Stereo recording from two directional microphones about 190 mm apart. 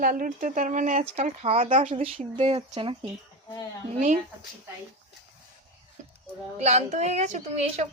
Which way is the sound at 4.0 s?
40° right (ahead or behind).